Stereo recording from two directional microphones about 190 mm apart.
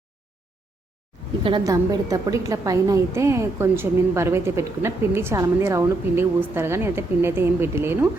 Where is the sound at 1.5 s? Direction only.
20° right (ahead or behind).